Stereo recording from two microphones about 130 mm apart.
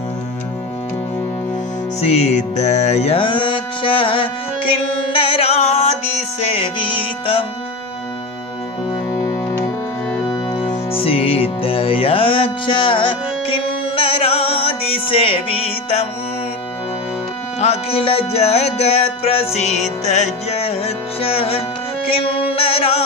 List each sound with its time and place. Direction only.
2.0 s music: 55° left (ahead or behind)
9.1 s music: 30° left (ahead or behind)
10.7 s music: 50° left (ahead or behind)
17.6 s music: 55° left (ahead or behind)
22.1 s chant: 45° left (ahead or behind)